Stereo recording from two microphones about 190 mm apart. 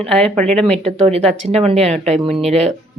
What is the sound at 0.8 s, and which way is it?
Speech, 30° right (ahead or behind).